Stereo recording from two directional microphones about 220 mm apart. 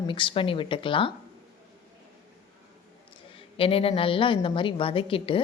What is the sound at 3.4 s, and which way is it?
Speech, 25° left (ahead or behind).